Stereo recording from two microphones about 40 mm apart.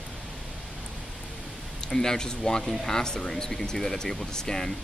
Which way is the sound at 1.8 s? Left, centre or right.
Centre.